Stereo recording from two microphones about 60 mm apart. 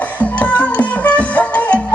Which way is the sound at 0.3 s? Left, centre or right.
Left.